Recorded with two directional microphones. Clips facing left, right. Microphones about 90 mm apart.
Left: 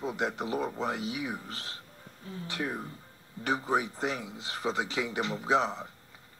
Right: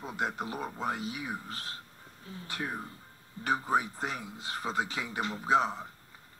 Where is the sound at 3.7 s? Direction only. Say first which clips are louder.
Left 1 dB; 40° right (ahead or behind).